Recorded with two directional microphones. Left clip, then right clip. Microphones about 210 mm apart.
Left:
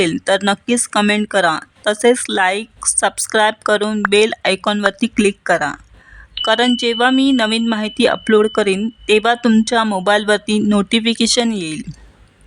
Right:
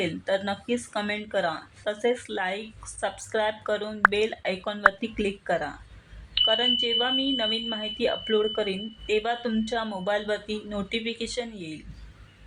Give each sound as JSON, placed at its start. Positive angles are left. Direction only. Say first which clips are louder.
{"t": 0.0, "sound": "speech", "louder": "left 12 dB", "side_deg": 50}